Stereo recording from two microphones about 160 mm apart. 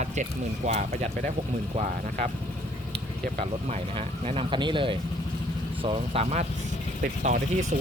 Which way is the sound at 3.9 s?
35° right (ahead or behind).